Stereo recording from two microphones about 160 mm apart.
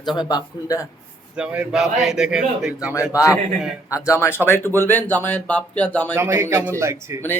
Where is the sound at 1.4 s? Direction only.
5° right (ahead or behind).